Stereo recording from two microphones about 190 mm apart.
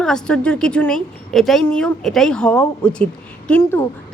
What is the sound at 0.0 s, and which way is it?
Speech, 5° left (ahead or behind).